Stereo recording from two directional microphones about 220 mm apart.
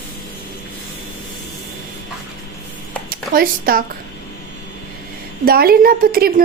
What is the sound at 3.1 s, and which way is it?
Speech, 40° right (ahead or behind).